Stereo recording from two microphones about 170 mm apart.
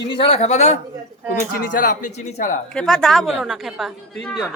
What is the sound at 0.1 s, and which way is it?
A man's voice, 30° left (ahead or behind).